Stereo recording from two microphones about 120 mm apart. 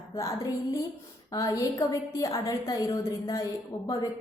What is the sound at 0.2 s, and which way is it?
A woman's voice, 25° left (ahead or behind).